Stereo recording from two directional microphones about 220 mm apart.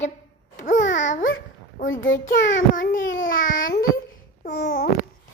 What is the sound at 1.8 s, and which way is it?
Speech, 60° left (ahead or behind).